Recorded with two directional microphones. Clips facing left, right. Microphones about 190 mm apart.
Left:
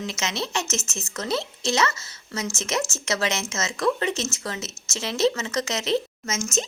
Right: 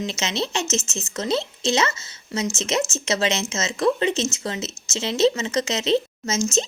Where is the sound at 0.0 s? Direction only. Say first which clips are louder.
Right 3 dB; 25° right (ahead or behind).